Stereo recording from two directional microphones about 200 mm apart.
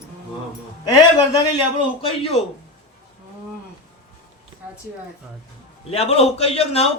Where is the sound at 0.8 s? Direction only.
20° left (ahead or behind).